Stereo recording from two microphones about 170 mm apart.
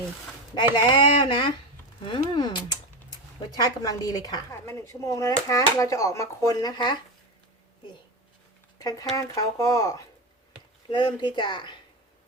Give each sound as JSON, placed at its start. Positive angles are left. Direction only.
{"t": 0.5, "sound": "speech", "side_deg": 25}
{"t": 8.8, "sound": "speech", "side_deg": 20}